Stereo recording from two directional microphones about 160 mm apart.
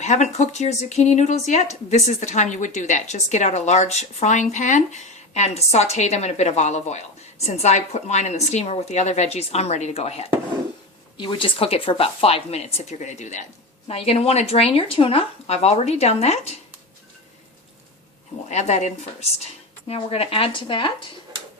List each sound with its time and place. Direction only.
0.0 s speech: 45° left (ahead or behind)
18.4 s speech: 45° left (ahead or behind)